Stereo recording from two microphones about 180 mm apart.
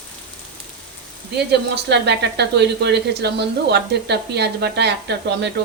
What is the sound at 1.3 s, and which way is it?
Speech, 65° right (ahead or behind).